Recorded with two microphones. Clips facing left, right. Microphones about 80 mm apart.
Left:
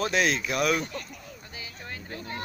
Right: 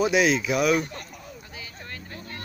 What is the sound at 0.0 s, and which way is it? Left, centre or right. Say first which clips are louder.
Speech: right 4 dB; centre.